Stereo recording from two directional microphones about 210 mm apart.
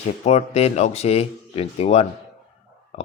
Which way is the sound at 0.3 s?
30° left (ahead or behind).